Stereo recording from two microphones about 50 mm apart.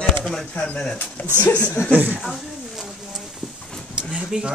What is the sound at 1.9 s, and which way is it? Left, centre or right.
Speech, right.